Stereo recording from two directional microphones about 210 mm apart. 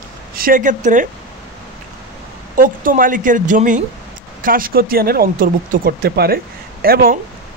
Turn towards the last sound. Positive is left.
turn(degrees=-45)  # may be behind; listen again after turning